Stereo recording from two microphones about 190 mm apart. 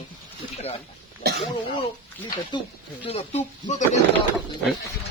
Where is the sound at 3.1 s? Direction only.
35° left (ahead or behind).